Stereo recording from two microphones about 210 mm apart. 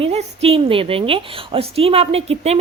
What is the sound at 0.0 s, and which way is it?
A woman's voice, 30° right (ahead or behind).